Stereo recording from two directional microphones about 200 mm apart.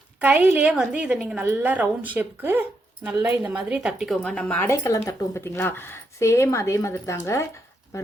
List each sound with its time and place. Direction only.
0.2 s a woman's voice: 10° right (ahead or behind); by 8.1 s 15° left (ahead or behind)